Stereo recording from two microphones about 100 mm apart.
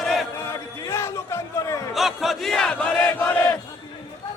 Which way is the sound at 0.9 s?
25° left (ahead or behind).